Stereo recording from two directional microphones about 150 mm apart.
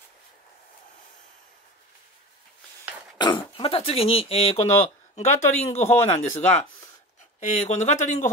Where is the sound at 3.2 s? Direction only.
35° left (ahead or behind).